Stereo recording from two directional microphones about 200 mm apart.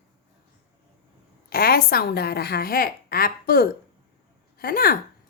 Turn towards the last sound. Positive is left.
turn(degrees=50)  # may be behind; listen again after turning